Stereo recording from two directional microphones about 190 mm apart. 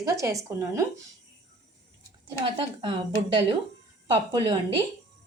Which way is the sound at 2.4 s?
25° right (ahead or behind).